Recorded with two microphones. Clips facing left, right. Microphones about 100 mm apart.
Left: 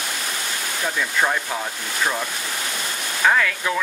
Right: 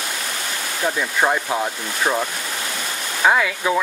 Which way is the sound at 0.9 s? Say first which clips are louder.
Right 1 dB; 20° right (ahead or behind).